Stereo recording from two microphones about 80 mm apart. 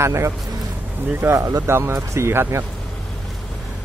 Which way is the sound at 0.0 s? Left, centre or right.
Right.